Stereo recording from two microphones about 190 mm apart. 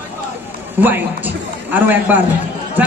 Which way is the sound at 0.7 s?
10° right (ahead or behind).